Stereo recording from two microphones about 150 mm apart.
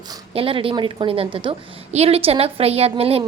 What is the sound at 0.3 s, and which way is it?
A woman's voice, 35° right (ahead or behind).